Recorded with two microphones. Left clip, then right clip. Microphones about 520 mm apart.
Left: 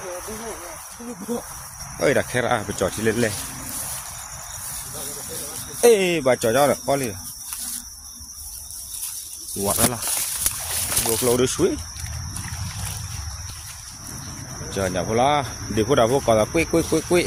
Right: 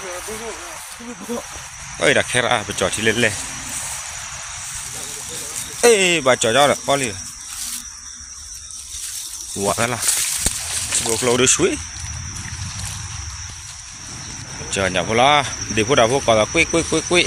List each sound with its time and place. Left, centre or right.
2.0 s speech: left
5.8 s speech: left
9.6 s speech: left
11.0 s speech: left
14.7 s speech: left